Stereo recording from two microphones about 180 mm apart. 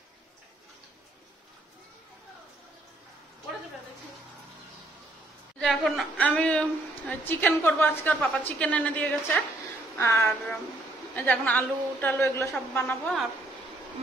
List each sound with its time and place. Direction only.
5.6 s a woman's voice: centre (ahead or behind)